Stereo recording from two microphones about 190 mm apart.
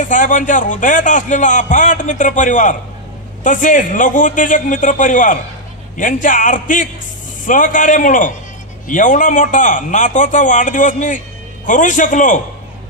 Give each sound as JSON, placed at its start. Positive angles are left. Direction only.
{"t": 0.0, "sound": "a man's voice", "side_deg": 40}